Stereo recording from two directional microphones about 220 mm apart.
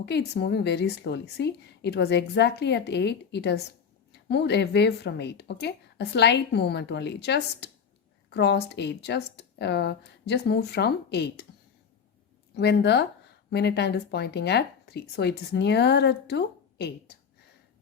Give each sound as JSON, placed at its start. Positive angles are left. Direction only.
{"t": 0.0, "sound": "speech", "side_deg": 50}
{"t": 12.5, "sound": "speech", "side_deg": 50}